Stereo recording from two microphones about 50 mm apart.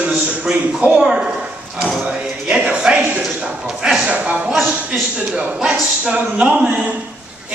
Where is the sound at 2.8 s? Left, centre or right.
Right.